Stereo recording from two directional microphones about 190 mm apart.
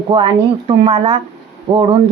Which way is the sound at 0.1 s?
25° right (ahead or behind).